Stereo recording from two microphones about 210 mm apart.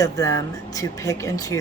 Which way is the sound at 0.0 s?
15° left (ahead or behind).